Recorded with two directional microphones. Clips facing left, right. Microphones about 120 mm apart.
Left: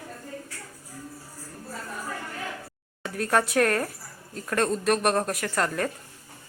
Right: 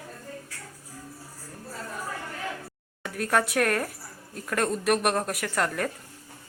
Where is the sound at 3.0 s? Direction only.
5° right (ahead or behind).